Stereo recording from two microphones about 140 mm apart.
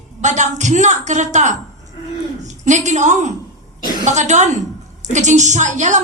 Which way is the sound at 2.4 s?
55° right (ahead or behind).